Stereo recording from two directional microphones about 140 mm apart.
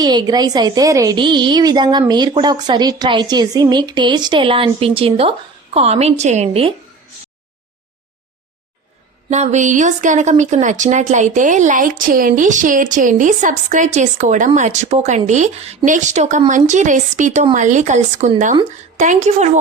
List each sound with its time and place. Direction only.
0.0 s a woman's voice: 30° right (ahead or behind)
9.3 s speech: 55° right (ahead or behind)